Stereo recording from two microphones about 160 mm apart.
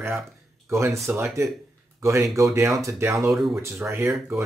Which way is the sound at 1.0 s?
20° right (ahead or behind).